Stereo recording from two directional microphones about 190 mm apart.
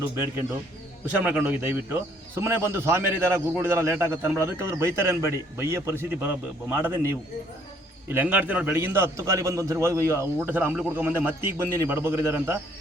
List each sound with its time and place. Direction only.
1.2 s a man's voice: 10° right (ahead or behind)